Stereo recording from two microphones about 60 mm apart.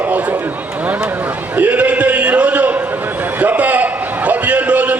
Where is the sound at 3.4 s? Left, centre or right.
Right.